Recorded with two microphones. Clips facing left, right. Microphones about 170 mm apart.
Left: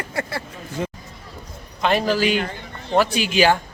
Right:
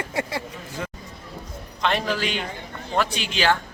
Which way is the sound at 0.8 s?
20° left (ahead or behind).